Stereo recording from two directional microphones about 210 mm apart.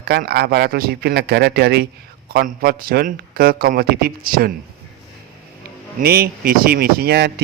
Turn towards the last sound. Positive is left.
turn(degrees=-50)  # may be behind; listen again after turning